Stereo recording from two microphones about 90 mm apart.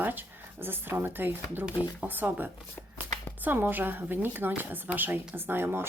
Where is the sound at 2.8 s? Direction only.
25° left (ahead or behind).